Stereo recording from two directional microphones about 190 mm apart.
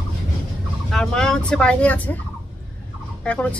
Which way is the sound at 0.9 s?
5° left (ahead or behind).